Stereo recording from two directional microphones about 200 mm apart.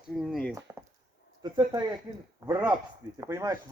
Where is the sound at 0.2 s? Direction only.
Centre (ahead or behind).